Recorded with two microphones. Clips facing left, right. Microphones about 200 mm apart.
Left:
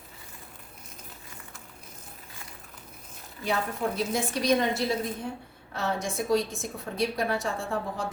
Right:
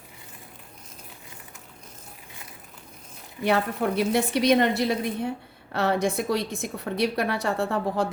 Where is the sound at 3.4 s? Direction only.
70° right (ahead or behind).